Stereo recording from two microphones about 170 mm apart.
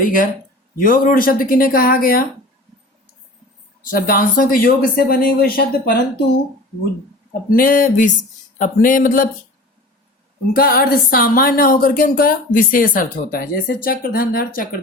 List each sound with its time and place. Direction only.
0.0 s speech: 55° left (ahead or behind)
3.8 s speech: 60° left (ahead or behind)
7.5 s speech: 55° left (ahead or behind)
10.5 s speech: 60° left (ahead or behind)